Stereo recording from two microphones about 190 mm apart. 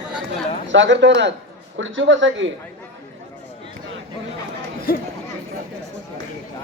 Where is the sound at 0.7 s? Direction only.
70° right (ahead or behind).